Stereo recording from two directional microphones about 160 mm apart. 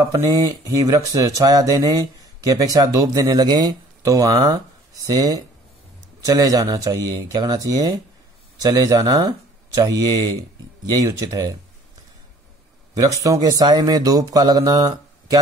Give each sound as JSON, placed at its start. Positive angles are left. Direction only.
{"t": 0.0, "sound": "speech", "side_deg": -20}
{"t": 12.9, "sound": "speech", "side_deg": -20}